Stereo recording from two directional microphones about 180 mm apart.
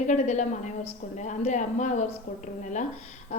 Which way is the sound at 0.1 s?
40° left (ahead or behind).